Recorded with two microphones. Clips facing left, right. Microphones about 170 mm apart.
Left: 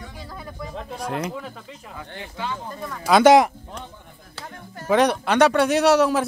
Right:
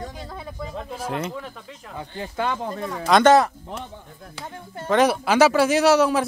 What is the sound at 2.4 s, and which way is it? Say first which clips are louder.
Speech: right 5 dB; 60° right (ahead or behind).